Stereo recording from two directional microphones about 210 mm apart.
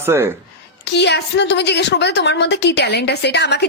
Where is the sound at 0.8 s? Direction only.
55° left (ahead or behind).